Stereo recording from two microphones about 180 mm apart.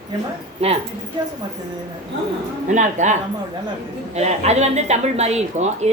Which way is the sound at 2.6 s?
40° right (ahead or behind).